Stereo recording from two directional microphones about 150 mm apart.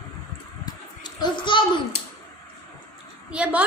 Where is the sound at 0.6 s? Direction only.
30° left (ahead or behind).